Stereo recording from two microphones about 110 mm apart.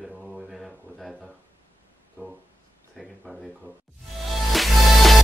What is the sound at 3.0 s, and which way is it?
Speech, centre (ahead or behind).